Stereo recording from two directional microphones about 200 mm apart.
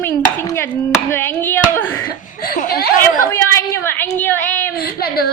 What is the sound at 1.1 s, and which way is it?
Speech, 10° left (ahead or behind).